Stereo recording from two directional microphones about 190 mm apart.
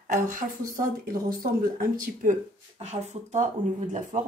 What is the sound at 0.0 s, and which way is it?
Speech, 45° right (ahead or behind).